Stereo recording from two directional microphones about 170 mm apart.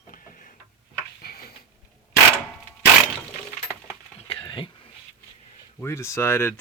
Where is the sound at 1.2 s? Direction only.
65° left (ahead or behind).